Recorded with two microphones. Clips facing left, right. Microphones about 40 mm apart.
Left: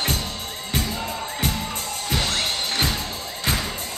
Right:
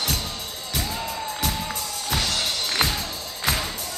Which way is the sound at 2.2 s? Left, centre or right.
Left.